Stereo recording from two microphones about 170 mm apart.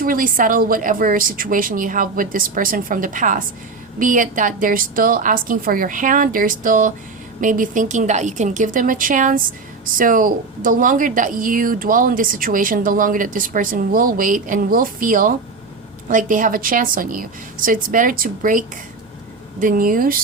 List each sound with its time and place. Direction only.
0.0 s a woman's voice: 55° right (ahead or behind)